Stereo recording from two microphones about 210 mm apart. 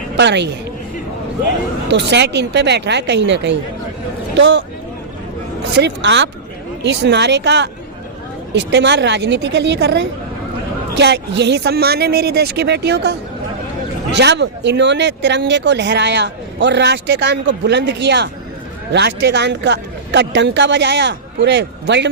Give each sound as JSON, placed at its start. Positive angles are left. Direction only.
{"t": 0.2, "sound": "speech", "side_deg": -55}
{"t": 1.9, "sound": "speech", "side_deg": -55}
{"t": 5.7, "sound": "a woman's voice", "side_deg": -55}